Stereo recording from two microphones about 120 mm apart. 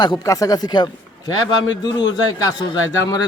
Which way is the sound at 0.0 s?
35° left (ahead or behind).